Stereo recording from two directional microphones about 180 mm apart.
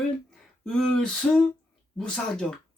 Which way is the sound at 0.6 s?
5° left (ahead or behind).